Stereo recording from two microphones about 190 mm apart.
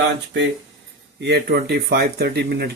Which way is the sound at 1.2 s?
60° right (ahead or behind).